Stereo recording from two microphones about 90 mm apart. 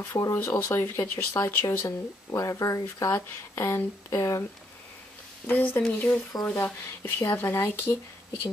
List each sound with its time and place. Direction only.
0.2 s speech: 30° left (ahead or behind)
2.3 s speech: 40° left (ahead or behind)
5.5 s speech: 20° left (ahead or behind)